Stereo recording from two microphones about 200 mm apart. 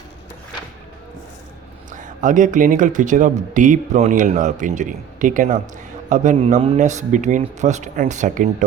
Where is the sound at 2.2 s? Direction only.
40° right (ahead or behind).